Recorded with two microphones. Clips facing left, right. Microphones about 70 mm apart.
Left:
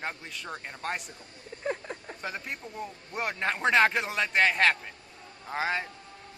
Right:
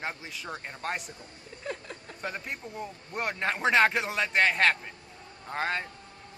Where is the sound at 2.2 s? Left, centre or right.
Centre.